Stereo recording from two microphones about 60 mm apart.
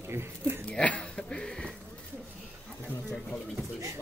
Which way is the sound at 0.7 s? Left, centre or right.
Centre.